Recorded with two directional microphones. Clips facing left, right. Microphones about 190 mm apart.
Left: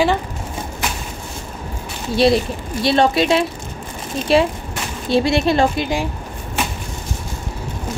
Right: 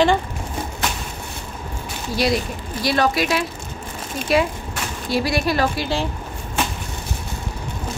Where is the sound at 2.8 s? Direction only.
25° left (ahead or behind).